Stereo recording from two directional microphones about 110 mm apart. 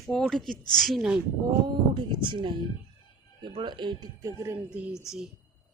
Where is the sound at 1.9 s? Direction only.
45° right (ahead or behind).